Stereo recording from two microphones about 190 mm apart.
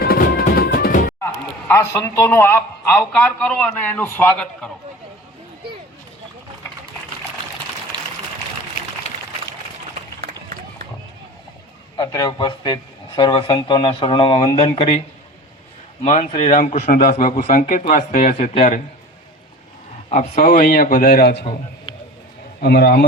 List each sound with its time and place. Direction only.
0.0 s music: 50° left (ahead or behind)
1.2 s a man's voice: 15° left (ahead or behind)
11.9 s speech: 20° left (ahead or behind)
16.0 s speech: 35° left (ahead or behind)
20.1 s a man's voice: 40° left (ahead or behind); by 21.4 s 55° left (ahead or behind)
22.6 s a man's voice: 60° left (ahead or behind)